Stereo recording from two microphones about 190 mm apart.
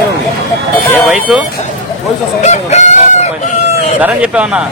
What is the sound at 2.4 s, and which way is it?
Crowing, 35° left (ahead or behind).